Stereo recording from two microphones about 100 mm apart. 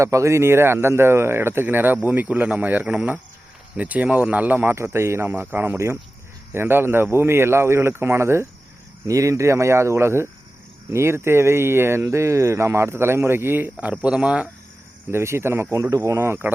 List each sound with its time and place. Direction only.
0.0 s speech: 30° right (ahead or behind); by 14.5 s 10° right (ahead or behind)
15.1 s speech: 25° right (ahead or behind)